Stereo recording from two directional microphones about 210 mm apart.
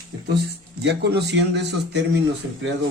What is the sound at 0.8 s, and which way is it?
A man's voice, 55° right (ahead or behind).